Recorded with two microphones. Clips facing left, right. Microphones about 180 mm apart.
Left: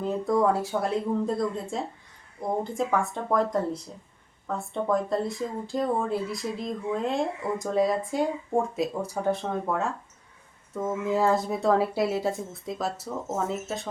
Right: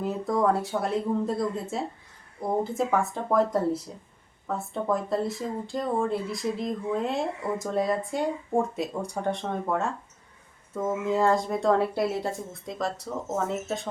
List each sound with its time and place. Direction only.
0.0 s speech: centre (ahead or behind)